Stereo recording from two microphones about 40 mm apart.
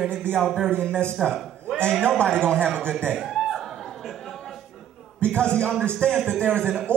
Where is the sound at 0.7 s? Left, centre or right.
Left.